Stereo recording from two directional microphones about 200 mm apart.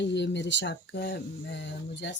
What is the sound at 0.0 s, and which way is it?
Speech, 60° left (ahead or behind).